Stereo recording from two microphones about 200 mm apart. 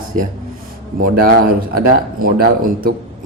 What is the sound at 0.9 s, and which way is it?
A man's voice, 45° right (ahead or behind).